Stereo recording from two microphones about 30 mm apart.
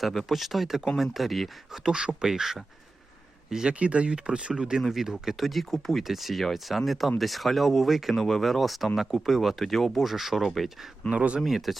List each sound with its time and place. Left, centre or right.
0.0 s speech: centre
1.9 s speech: right
2.2 s speech: centre
3.7 s speech: right
5.0 s speech: centre
6.0 s speech: centre
8.1 s speech: centre
11.1 s speech: right
11.3 s speech: centre